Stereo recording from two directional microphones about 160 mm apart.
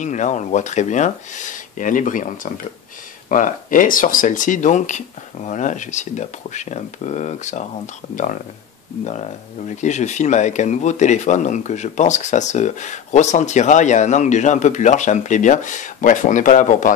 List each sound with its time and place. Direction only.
0.0 s speech: 50° left (ahead or behind)